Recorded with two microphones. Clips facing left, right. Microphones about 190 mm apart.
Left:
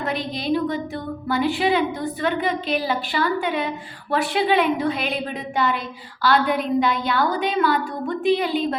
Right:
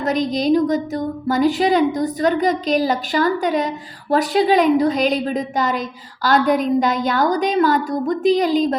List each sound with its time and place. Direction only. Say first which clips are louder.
0.0 s a woman's voice: right 7 dB; 40° right (ahead or behind)